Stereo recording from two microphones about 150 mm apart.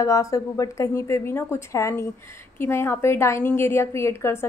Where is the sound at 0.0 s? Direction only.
20° left (ahead or behind).